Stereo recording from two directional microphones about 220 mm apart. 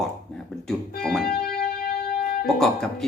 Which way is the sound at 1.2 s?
45° left (ahead or behind).